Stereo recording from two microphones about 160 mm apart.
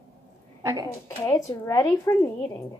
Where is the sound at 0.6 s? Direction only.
20° right (ahead or behind).